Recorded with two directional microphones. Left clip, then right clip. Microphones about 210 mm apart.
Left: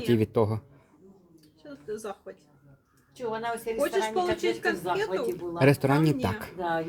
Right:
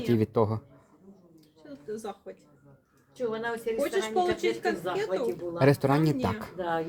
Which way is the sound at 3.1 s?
20° left (ahead or behind).